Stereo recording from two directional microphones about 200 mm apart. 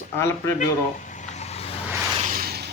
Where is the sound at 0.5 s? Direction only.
40° left (ahead or behind).